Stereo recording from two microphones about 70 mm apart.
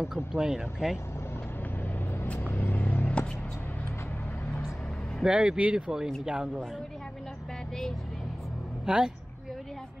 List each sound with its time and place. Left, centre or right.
0.0 s speech: centre
2.4 s vehicle: left
5.2 s speech: centre
8.8 s speech: centre